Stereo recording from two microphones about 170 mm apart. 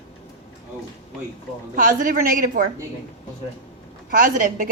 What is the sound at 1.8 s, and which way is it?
Speech, 50° right (ahead or behind).